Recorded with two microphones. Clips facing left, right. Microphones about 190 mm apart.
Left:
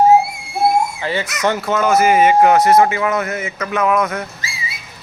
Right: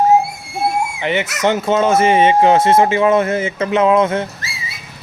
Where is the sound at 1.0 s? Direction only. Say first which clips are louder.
Right 2 dB; 20° right (ahead or behind).